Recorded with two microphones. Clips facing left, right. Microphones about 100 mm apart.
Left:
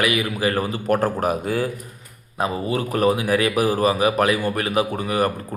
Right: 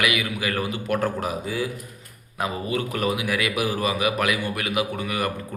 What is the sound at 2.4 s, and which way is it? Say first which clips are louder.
A man's voice: left 3 dB; 30° left (ahead or behind).